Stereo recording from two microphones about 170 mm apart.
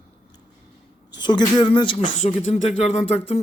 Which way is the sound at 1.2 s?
25° left (ahead or behind).